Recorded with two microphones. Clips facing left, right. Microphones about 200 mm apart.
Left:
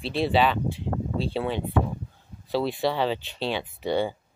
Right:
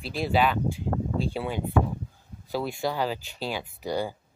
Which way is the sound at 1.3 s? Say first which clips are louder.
Left 3 dB; 10° right (ahead or behind).